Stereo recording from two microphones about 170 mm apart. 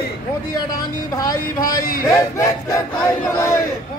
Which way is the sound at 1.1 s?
20° left (ahead or behind).